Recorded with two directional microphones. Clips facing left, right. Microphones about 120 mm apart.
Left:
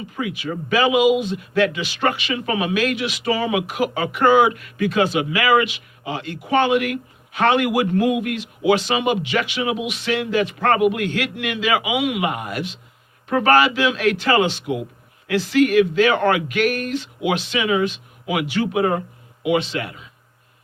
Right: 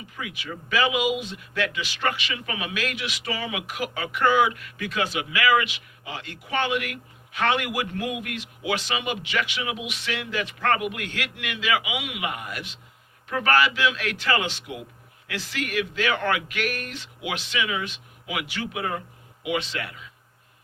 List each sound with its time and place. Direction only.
0.2 s speech: 30° left (ahead or behind)